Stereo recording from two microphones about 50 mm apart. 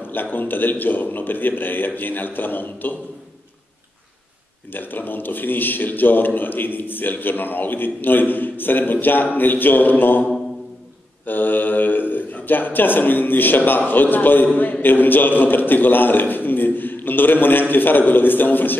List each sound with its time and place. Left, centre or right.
0.1 s a man's voice: left
4.7 s a man's voice: left
11.2 s a man's voice: left